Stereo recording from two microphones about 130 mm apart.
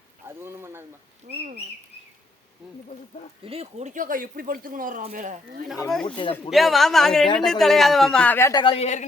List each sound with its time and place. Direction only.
0.3 s a sound: 15° right (ahead or behind)
3.4 s speech: 50° right (ahead or behind); by 5.0 s 90° right
5.1 s speech: 80° right
5.9 s speech: 5° left (ahead or behind)
8.5 s speech: 40° left (ahead or behind)
8.8 s speech: 65° left (ahead or behind)